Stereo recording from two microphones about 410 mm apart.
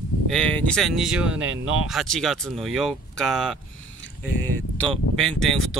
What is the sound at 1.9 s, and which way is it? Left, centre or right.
Speech, centre.